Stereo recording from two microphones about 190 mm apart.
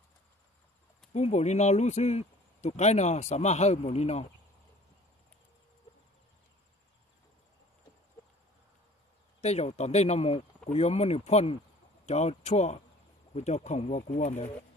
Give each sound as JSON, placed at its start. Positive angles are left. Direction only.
{"t": 1.1, "sound": "speech", "side_deg": 35}
{"t": 9.4, "sound": "speech", "side_deg": 35}